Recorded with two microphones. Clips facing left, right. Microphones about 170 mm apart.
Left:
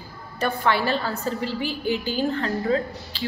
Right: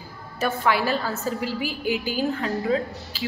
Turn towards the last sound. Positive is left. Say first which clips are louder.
# left 1 dB
turn(degrees=-5)  # may be behind; listen again after turning